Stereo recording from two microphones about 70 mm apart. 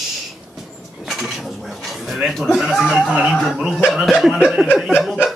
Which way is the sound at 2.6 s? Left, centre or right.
Centre.